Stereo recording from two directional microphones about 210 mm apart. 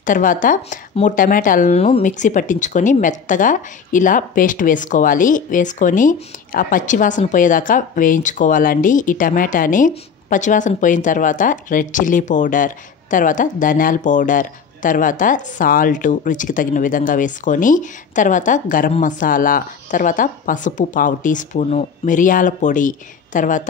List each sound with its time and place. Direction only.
0.0 s speech: 40° left (ahead or behind)